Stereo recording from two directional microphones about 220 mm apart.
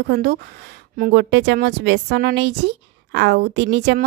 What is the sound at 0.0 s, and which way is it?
A woman's voice, 45° right (ahead or behind).